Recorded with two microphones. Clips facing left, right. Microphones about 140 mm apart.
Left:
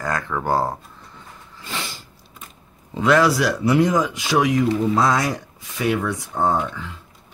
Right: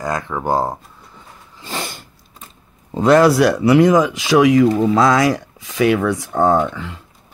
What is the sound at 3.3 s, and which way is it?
Speech, 55° right (ahead or behind).